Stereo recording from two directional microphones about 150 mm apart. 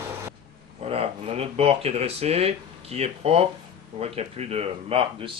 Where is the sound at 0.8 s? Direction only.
40° right (ahead or behind).